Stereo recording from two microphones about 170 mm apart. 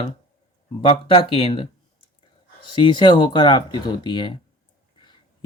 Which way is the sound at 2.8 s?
25° left (ahead or behind).